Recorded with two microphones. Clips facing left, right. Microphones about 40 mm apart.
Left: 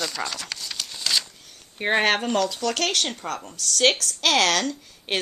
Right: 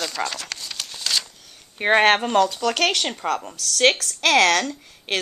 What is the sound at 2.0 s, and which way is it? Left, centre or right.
A woman's voice, right.